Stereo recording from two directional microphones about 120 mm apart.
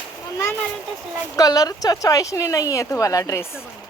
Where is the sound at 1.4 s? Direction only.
30° left (ahead or behind).